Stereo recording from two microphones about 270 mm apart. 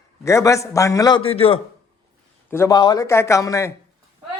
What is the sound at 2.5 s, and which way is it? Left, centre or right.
A man's voice, centre.